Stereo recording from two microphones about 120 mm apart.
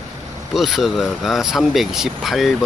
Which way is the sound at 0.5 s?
Centre (ahead or behind).